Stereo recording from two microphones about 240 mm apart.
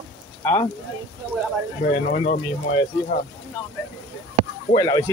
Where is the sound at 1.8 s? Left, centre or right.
Left.